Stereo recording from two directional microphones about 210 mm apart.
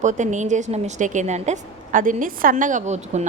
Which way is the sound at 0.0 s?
35° right (ahead or behind).